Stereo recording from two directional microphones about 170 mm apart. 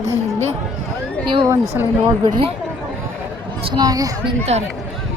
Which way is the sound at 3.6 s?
25° right (ahead or behind).